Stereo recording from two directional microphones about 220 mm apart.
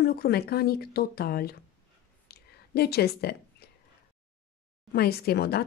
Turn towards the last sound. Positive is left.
turn(degrees=45)  # may be behind; listen again after turning